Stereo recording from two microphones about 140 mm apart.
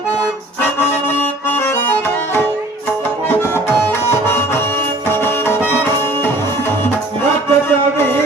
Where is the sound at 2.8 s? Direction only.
15° left (ahead or behind).